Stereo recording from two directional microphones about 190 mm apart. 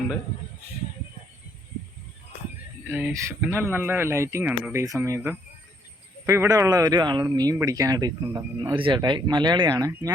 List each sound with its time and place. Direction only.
2.9 s speech: 15° right (ahead or behind)